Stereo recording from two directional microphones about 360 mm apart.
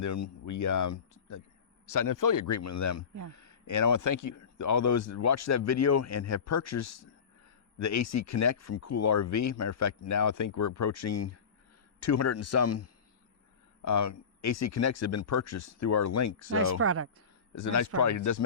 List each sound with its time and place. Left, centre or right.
0.0 s speech: left
16.7 s speech: right
17.5 s speech: left